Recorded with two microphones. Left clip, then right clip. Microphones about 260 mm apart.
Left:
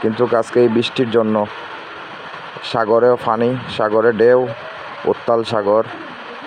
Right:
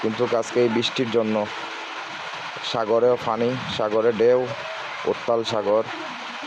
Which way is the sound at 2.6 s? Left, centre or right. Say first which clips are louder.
Left 6 dB; centre.